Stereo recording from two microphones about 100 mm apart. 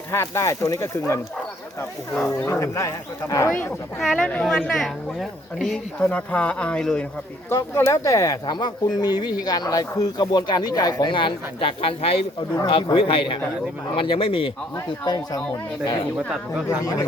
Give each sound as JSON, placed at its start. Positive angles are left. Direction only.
{"t": 0.1, "sound": "speech", "side_deg": 30}
{"t": 2.4, "sound": "speech", "side_deg": 30}
{"t": 4.2, "sound": "speech", "side_deg": 10}
{"t": 4.4, "sound": "speech", "side_deg": 0}
{"t": 6.0, "sound": "speech", "side_deg": 15}
{"t": 7.5, "sound": "speech", "side_deg": 25}
{"t": 8.4, "sound": "speech", "side_deg": 45}
{"t": 11.1, "sound": "speech", "side_deg": 55}
{"t": 12.6, "sound": "a man's voice", "side_deg": 60}
{"t": 15.0, "sound": "speech", "side_deg": 45}
{"t": 16.6, "sound": "speech", "side_deg": 35}